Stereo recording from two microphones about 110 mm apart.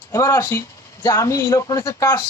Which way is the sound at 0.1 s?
25° left (ahead or behind).